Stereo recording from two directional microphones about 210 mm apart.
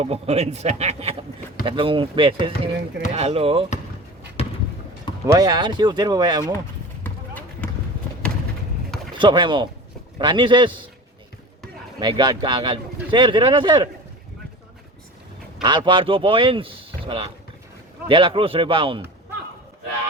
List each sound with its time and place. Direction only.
0.0 s a man's voice: 30° right (ahead or behind)
4.4 s a sound: 30° left (ahead or behind)
5.2 s speech: 15° right (ahead or behind)
9.1 s speech: 20° right (ahead or behind)
11.9 s speech: 20° right (ahead or behind)
15.6 s speech: 20° right (ahead or behind)